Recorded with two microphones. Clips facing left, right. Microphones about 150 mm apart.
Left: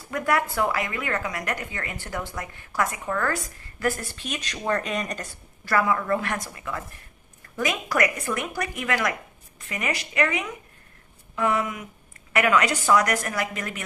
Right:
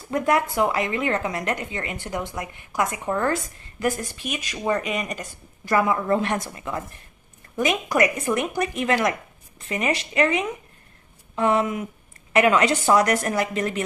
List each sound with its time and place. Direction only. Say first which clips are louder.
0.1 s a woman's voice: right 3 dB; 20° right (ahead or behind)